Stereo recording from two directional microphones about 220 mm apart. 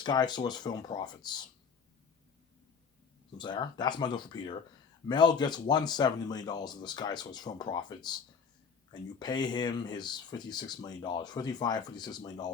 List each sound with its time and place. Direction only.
0.0 s speech: 20° left (ahead or behind)
3.3 s speech: 20° left (ahead or behind)